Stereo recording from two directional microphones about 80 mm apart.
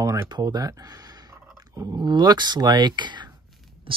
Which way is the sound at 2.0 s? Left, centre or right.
Right.